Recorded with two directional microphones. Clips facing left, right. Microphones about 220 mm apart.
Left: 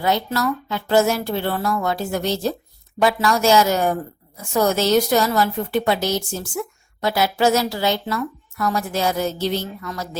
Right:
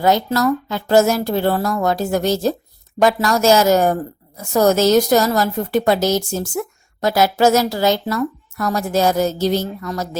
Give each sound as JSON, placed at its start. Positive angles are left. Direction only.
{"t": 0.0, "sound": "a woman's voice", "side_deg": -45}